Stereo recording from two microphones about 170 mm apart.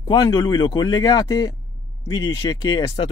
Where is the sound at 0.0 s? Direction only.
25° left (ahead or behind).